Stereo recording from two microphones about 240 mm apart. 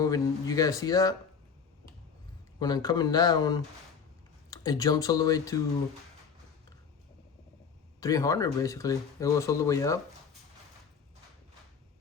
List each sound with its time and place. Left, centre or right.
0.0 s speech: centre
2.6 s speech: centre
8.0 s speech: centre